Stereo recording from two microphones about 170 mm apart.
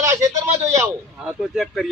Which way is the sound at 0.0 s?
20° right (ahead or behind).